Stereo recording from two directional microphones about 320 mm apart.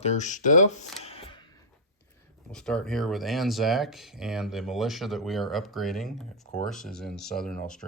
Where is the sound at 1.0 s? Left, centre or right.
Centre.